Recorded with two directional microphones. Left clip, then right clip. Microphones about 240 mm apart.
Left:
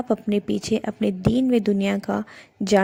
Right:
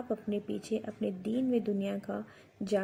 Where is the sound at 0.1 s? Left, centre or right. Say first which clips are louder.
Left 12 dB; left.